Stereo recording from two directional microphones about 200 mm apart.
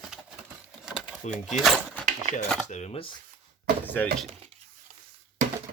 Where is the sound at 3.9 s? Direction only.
5° left (ahead or behind).